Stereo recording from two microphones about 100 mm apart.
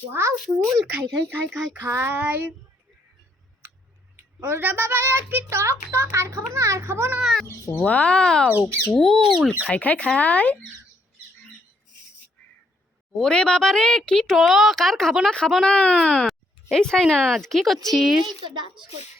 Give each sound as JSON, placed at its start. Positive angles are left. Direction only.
{"t": 0.1, "sound": "a woman's voice", "side_deg": -25}
{"t": 0.9, "sound": "a woman's voice", "side_deg": -15}
{"t": 4.4, "sound": "a woman's voice", "side_deg": -25}
{"t": 7.2, "sound": "speech", "side_deg": 0}
{"t": 7.8, "sound": "speech", "side_deg": 15}
{"t": 13.1, "sound": "speech", "side_deg": 5}
{"t": 18.4, "sound": "a child's voice", "side_deg": -50}